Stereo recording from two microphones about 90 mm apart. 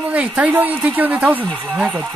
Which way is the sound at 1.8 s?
Centre (ahead or behind).